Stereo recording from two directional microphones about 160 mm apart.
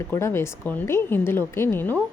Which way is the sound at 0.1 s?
15° left (ahead or behind).